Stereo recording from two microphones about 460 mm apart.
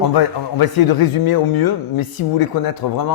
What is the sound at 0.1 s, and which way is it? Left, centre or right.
Speech, left.